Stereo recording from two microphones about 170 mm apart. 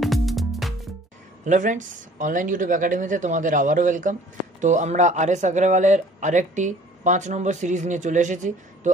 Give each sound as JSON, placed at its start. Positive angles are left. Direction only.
{"t": 0.0, "sound": "music", "side_deg": 0}
{"t": 1.4, "sound": "speech", "side_deg": -45}